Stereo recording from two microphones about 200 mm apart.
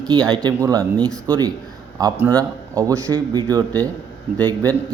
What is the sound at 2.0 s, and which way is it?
A man's voice, 10° right (ahead or behind).